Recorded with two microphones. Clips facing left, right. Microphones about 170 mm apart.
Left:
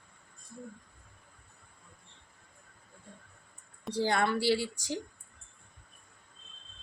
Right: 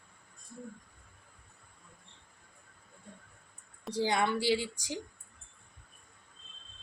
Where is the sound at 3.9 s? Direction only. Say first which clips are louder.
Left 1 dB; 15° right (ahead or behind).